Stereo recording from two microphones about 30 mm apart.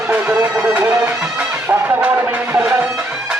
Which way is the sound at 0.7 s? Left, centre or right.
Right.